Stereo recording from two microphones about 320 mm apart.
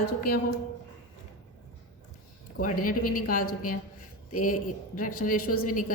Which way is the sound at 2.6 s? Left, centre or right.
Left.